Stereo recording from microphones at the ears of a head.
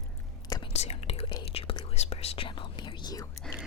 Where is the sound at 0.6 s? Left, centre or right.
Left.